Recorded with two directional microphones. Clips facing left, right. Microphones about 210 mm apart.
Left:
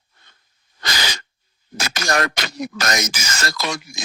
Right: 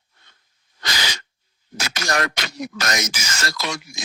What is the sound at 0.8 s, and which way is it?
Sneeze, 45° left (ahead or behind).